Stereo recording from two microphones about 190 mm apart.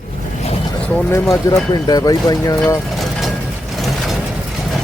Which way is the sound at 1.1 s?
20° left (ahead or behind).